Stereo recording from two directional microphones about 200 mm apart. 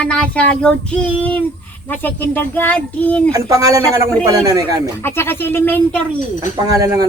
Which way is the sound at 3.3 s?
15° right (ahead or behind).